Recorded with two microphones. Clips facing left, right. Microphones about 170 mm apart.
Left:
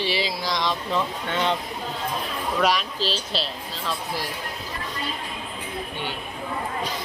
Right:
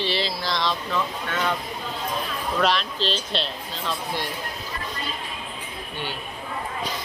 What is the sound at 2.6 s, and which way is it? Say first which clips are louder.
Speech: even; 10° left (ahead or behind).